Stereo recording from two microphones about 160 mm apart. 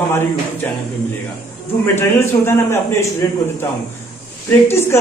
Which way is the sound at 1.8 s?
15° left (ahead or behind).